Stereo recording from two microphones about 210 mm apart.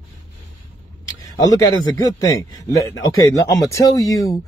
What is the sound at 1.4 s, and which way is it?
Speech, 15° left (ahead or behind).